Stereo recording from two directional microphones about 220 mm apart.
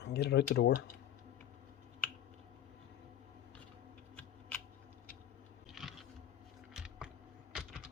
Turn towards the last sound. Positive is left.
turn(degrees=-5)  # may be behind; listen again after turning